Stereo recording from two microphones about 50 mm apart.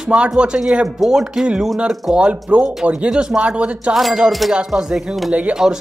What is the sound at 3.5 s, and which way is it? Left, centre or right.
Speech, right.